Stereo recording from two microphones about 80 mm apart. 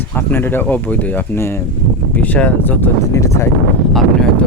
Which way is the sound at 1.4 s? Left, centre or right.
Left.